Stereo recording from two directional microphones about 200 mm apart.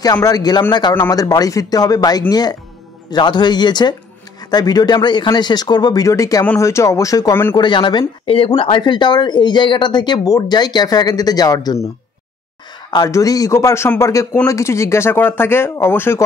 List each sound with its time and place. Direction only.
0.0 s a man's voice: 20° left (ahead or behind)
12.9 s a man's voice: 20° left (ahead or behind)